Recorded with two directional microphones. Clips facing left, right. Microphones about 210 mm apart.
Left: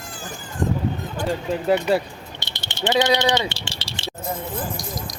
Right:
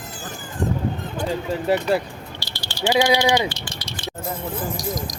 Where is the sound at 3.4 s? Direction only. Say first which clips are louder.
Right 2 dB; 25° left (ahead or behind).